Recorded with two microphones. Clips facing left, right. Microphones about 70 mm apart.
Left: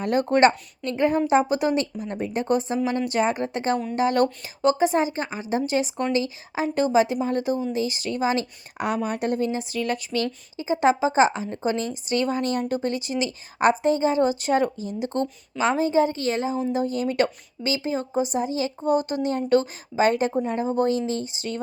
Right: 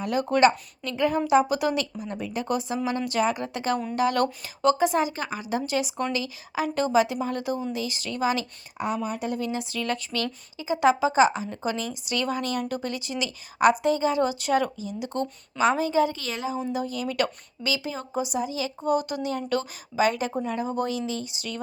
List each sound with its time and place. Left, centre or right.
0.0 s a woman's voice: left
9.0 s speech: left
9.4 s a woman's voice: left